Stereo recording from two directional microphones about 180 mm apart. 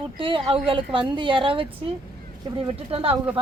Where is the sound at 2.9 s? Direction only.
35° right (ahead or behind).